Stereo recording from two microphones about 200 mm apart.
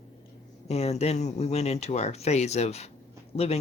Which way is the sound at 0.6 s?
30° left (ahead or behind).